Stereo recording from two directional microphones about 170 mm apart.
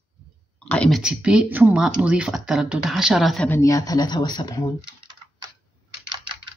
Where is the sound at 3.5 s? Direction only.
20° left (ahead or behind).